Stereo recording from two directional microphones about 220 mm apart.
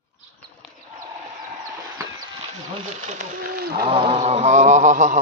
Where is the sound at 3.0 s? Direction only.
35° right (ahead or behind).